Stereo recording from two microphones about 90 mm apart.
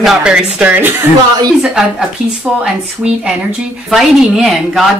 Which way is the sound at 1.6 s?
5° right (ahead or behind).